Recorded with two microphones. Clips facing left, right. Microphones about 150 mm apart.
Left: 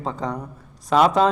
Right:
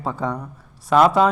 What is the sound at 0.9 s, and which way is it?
Speech, 5° right (ahead or behind).